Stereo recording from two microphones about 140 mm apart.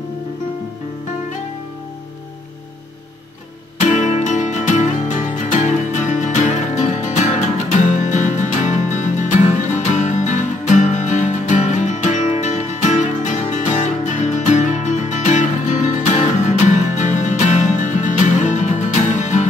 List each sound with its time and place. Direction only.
3.8 s music: 60° left (ahead or behind)